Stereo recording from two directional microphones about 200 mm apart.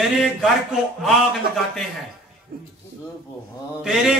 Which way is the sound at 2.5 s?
50° right (ahead or behind).